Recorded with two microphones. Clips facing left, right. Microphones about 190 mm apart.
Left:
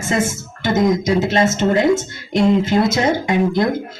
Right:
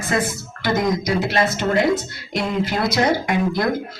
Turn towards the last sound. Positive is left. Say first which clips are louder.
# left 4 dB
turn(degrees=25)  # may be behind; listen again after turning